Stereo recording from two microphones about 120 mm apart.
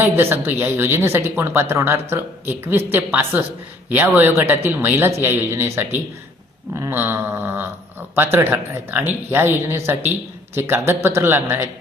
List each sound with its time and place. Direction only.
0.0 s speech: 20° right (ahead or behind)